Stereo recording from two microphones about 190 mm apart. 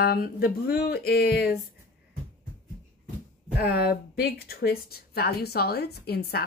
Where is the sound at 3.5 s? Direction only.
55° left (ahead or behind).